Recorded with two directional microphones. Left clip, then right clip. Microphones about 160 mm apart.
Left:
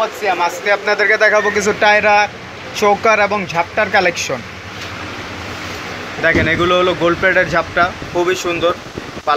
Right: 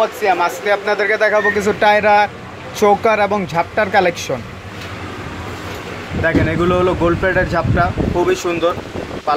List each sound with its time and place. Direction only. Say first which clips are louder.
0.0 s speech: right 1 dB; 30° right (ahead or behind)
0.7 s speech: left 4 dB; 10° right (ahead or behind)
6.2 s speech: left 3 dB; centre (ahead or behind)